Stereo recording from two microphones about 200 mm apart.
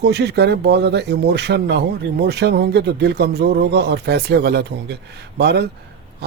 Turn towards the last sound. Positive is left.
turn(degrees=-55)  # may be behind; listen again after turning